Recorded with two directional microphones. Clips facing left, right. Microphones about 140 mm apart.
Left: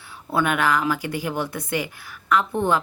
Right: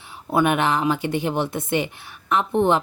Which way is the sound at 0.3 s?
20° right (ahead or behind).